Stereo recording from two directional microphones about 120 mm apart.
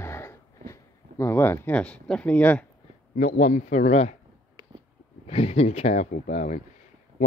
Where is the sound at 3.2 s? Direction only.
90° left.